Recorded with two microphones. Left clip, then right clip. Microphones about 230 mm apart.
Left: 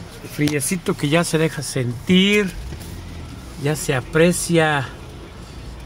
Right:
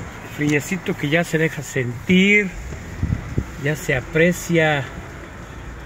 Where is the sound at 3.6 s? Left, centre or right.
Left.